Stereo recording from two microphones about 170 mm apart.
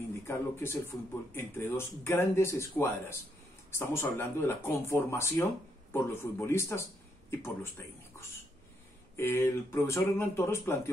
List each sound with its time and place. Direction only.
0.3 s speech: 15° left (ahead or behind)